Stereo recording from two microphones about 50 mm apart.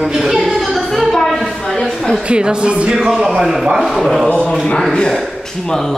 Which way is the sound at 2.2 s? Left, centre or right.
Right.